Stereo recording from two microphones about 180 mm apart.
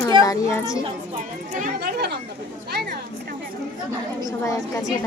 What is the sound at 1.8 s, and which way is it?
Chatter, 65° right (ahead or behind).